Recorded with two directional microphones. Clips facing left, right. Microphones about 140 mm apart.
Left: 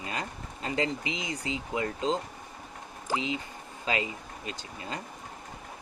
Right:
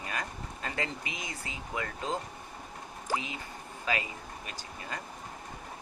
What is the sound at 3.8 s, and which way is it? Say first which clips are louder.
Speech: left 3 dB; 25° left (ahead or behind).